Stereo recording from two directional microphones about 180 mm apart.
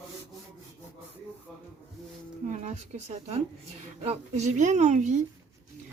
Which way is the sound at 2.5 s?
45° right (ahead or behind).